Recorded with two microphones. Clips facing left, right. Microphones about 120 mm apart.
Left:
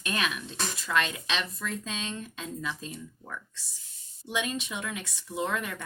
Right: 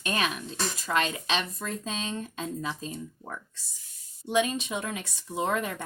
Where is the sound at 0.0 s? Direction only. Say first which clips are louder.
Right 2 dB; 35° right (ahead or behind).